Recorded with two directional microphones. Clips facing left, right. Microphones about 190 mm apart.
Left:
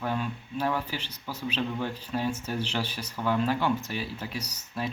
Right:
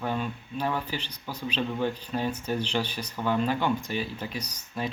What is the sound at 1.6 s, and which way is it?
Speech, 15° right (ahead or behind).